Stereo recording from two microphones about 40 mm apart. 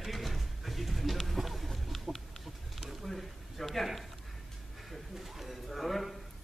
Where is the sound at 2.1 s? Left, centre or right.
Right.